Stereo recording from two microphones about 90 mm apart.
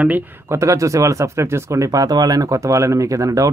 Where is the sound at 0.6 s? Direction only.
35° right (ahead or behind).